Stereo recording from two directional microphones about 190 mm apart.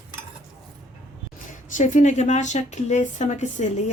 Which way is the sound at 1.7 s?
40° left (ahead or behind).